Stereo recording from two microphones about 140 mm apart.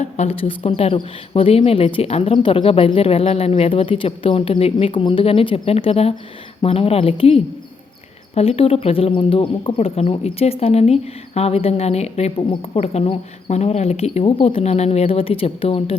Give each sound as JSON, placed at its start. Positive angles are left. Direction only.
{"t": 0.0, "sound": "speech", "side_deg": 50}